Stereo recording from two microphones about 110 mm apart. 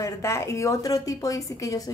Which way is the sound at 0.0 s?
25° left (ahead or behind).